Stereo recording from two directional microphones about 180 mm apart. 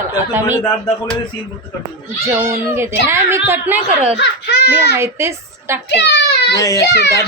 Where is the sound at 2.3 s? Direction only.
15° right (ahead or behind).